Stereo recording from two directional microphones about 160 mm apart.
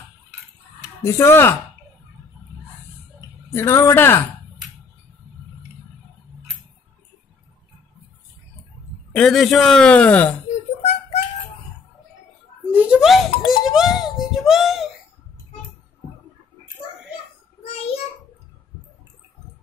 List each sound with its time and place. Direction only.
1.0 s speech: 15° left (ahead or behind)
3.2 s speech: 15° left (ahead or behind)
9.1 s a man's voice: centre (ahead or behind)
10.8 s fowl: 40° left (ahead or behind)
12.7 s a man's voice: 5° right (ahead or behind)